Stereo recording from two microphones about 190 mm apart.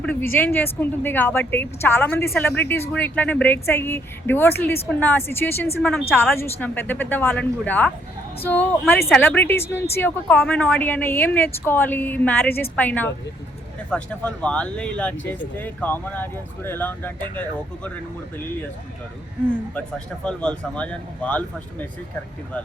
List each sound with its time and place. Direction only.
0.0 s a woman's voice: 10° left (ahead or behind)
20.2 s a woman's voice: 5° left (ahead or behind)